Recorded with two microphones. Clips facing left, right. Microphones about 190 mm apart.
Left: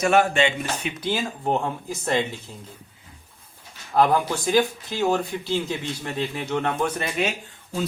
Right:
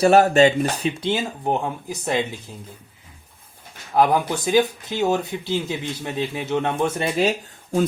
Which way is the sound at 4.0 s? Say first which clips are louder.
Right 1 dB; 15° right (ahead or behind).